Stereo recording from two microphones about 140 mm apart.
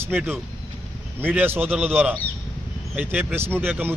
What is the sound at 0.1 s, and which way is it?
Speech, 10° right (ahead or behind).